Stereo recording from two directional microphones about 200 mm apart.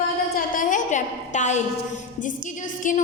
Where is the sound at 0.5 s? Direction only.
40° left (ahead or behind).